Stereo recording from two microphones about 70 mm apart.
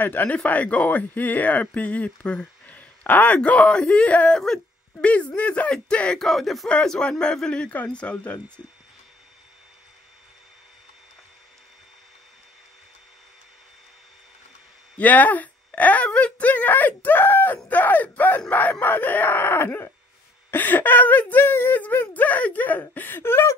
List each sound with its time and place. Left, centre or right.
0.0 s speech: left
6.2 s speech: centre
6.7 s speech: centre
15.0 s speech: left